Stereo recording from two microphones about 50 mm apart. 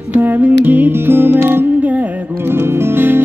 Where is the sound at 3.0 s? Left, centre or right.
Right.